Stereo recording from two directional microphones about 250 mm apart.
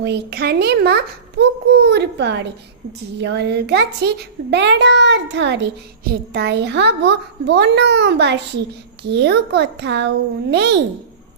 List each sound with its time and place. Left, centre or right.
0.0 s a child's voice: right